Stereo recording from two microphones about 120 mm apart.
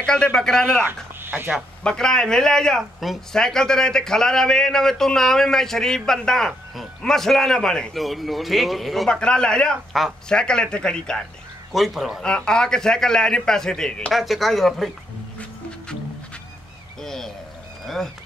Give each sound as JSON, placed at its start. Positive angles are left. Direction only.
{"t": 0.0, "sound": "speech", "side_deg": 5}
{"t": 1.2, "sound": "speech", "side_deg": -15}
{"t": 1.8, "sound": "speech", "side_deg": 5}
{"t": 17.0, "sound": "a sound", "side_deg": 5}
{"t": 17.8, "sound": "speech", "side_deg": 0}